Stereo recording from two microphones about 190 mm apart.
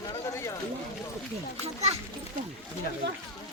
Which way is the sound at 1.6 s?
35° right (ahead or behind).